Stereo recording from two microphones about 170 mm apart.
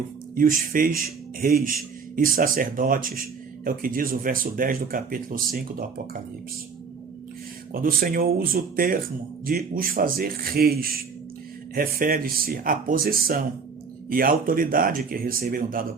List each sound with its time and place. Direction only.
0.3 s speech: 55° right (ahead or behind)
7.7 s speech: 55° right (ahead or behind)